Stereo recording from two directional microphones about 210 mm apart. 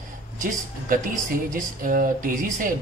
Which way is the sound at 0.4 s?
40° right (ahead or behind).